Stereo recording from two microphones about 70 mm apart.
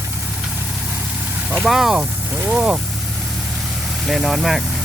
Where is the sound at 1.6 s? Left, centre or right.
Centre.